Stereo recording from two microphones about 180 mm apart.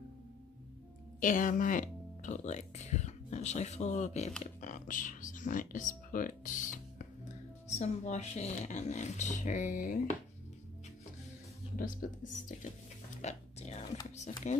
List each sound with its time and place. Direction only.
1.2 s speech: 45° left (ahead or behind)
11.7 s speech: 50° left (ahead or behind)
13.2 s whispering: 40° left (ahead or behind)
14.4 s speech: 40° left (ahead or behind)